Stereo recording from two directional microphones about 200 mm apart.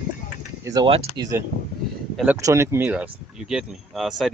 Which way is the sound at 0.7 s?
25° right (ahead or behind).